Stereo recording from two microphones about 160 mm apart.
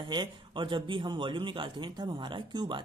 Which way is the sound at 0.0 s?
30° right (ahead or behind).